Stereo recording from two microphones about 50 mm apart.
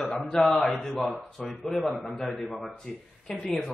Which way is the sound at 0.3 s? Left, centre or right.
Centre.